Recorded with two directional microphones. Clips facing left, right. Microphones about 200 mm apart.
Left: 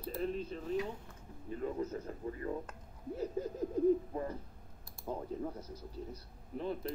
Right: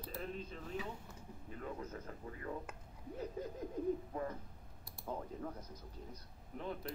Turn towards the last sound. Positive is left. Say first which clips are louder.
# left 3 dB
turn(degrees=15)  # may be behind; listen again after turning